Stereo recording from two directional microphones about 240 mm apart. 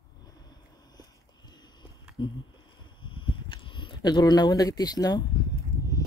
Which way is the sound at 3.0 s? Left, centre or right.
Left.